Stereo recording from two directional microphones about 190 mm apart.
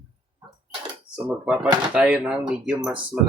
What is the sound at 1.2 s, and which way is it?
Speech, 5° right (ahead or behind).